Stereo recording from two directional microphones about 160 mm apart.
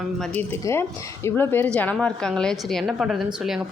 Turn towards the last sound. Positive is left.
turn(degrees=-5)  # may be behind; listen again after turning